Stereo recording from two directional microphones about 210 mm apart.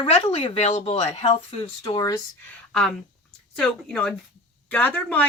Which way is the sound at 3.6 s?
5° left (ahead or behind).